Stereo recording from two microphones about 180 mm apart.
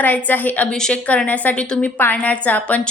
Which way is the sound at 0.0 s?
10° left (ahead or behind).